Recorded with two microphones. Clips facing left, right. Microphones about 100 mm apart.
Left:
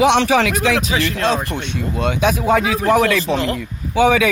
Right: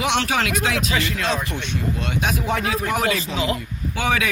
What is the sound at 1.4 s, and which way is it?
Speech, 55° left (ahead or behind).